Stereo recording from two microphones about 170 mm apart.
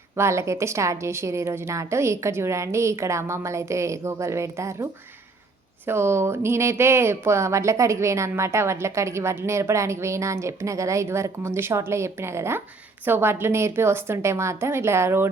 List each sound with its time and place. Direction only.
0.2 s speech: 15° right (ahead or behind)